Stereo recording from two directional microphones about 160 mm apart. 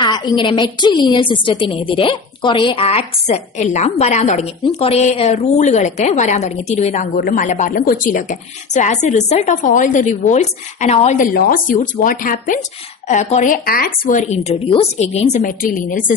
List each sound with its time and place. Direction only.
0.0 s a woman's voice: 25° left (ahead or behind); by 7.1 s 45° left (ahead or behind)
7.2 s a woman's voice: 60° left (ahead or behind)
13.1 s a woman's voice: 45° left (ahead or behind)